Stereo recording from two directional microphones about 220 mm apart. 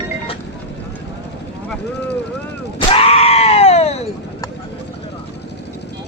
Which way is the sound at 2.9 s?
25° left (ahead or behind).